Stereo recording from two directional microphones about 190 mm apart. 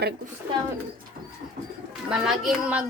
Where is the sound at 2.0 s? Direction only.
Centre (ahead or behind).